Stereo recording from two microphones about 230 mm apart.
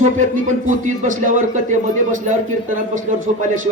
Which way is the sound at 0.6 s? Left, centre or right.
Right.